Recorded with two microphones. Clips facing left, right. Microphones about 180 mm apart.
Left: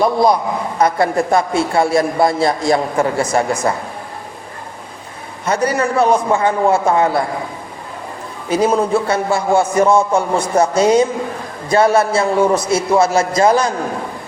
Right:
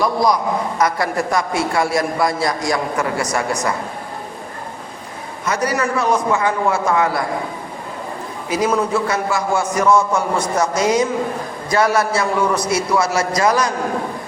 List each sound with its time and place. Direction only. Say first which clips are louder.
0.0 s a man's voice: left 3 dB; 25° left (ahead or behind)
5.5 s a man's voice: left 3 dB; 30° left (ahead or behind)
8.4 s a man's voice: left 4 dB; 30° left (ahead or behind)